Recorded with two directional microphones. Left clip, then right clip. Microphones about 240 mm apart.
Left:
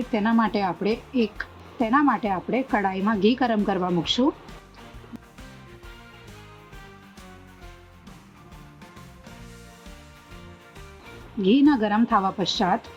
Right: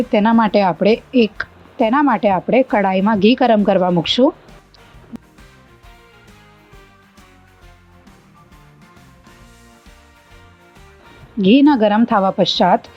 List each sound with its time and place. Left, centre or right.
0.1 s a woman's voice: right
5.1 s music: centre
11.3 s a woman's voice: right